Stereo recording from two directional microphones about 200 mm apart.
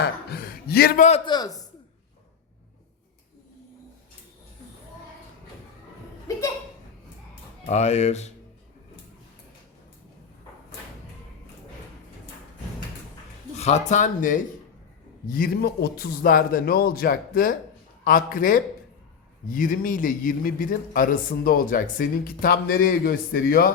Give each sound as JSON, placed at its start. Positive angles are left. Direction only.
{"t": 0.0, "sound": "a man's voice", "side_deg": 50}
{"t": 1.2, "sound": "a man's voice", "side_deg": 20}
{"t": 7.7, "sound": "speech", "side_deg": 35}
{"t": 13.6, "sound": "a man's voice", "side_deg": 35}